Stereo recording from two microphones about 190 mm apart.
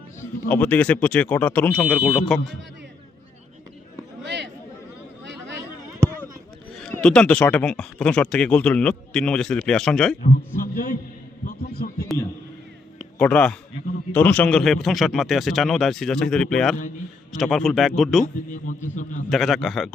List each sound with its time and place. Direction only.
0.2 s speech: 10° left (ahead or behind)
4.2 s a sound: 65° right (ahead or behind)
6.8 s speech: 5° left (ahead or behind)
10.2 s a man's voice: 50° left (ahead or behind)
11.4 s heart sounds: 50° left (ahead or behind)
13.1 s a man's voice: 5° left (ahead or behind)
18.3 s a man's voice: 45° left (ahead or behind)
19.3 s speech: centre (ahead or behind)